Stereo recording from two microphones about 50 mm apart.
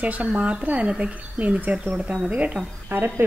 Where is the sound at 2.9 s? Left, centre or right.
Right.